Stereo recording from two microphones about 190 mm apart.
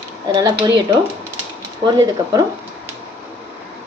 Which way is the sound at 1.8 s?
20° right (ahead or behind).